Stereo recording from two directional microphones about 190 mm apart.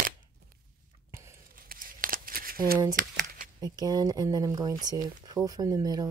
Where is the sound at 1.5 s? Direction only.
50° right (ahead or behind).